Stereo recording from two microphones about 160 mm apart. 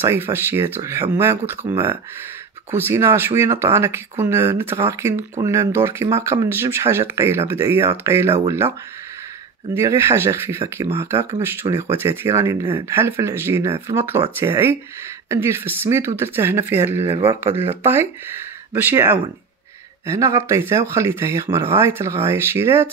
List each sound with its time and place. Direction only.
0.0 s speech: 15° right (ahead or behind)
9.8 s speech: 15° right (ahead or behind)